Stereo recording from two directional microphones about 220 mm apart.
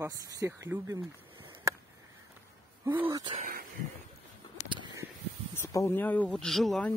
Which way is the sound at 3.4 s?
40° right (ahead or behind).